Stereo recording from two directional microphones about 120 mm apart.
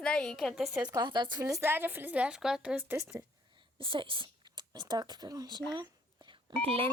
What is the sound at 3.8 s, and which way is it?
Speech, 45° right (ahead or behind).